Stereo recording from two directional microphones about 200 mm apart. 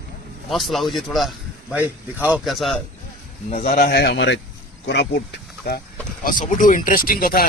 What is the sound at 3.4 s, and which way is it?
Speech, 35° left (ahead or behind).